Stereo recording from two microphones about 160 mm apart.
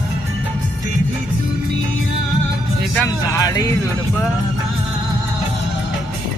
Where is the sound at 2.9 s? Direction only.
20° left (ahead or behind).